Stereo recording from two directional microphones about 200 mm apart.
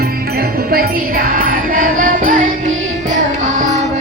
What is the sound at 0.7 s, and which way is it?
Music, 45° right (ahead or behind).